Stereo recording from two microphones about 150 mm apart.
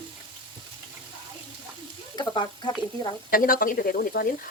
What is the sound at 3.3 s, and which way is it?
A woman's voice, 70° left (ahead or behind).